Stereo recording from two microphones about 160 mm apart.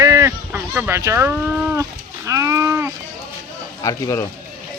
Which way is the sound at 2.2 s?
20° right (ahead or behind).